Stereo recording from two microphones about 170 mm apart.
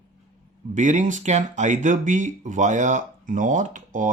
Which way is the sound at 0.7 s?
45° right (ahead or behind).